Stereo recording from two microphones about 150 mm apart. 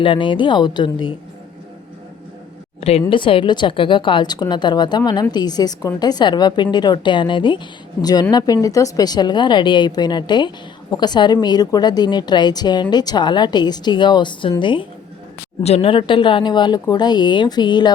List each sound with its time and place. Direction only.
0.0 s a woman's voice: 35° left (ahead or behind)
3.1 s a woman's voice: 35° left (ahead or behind)